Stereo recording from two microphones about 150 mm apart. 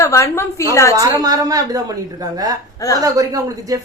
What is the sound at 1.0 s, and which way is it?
A woman's voice, 25° right (ahead or behind).